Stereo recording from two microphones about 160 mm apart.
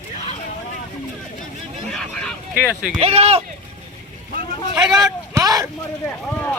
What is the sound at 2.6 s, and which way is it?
Speech, 5° left (ahead or behind).